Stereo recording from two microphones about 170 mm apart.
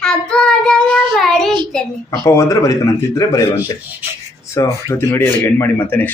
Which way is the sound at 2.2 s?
20° left (ahead or behind).